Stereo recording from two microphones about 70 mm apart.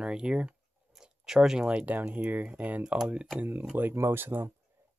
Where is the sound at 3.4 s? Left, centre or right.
Right.